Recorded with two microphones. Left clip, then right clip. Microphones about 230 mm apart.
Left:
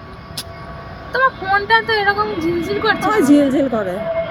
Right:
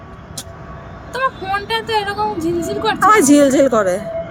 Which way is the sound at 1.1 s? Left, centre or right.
Centre.